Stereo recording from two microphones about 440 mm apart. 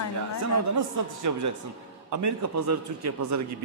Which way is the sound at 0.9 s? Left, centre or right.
Right.